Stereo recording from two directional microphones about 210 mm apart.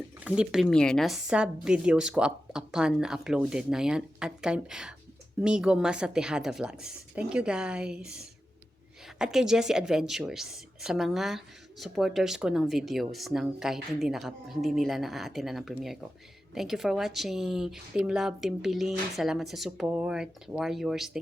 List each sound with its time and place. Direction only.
0.3 s a woman's voice: 5° right (ahead or behind)